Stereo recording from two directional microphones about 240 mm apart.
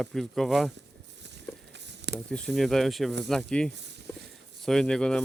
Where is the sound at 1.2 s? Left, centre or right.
Right.